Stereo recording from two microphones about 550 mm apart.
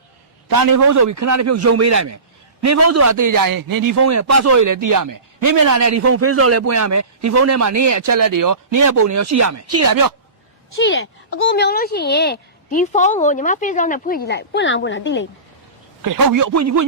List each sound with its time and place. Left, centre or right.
0.4 s a man's voice: right
10.8 s speech: left
16.0 s a man's voice: right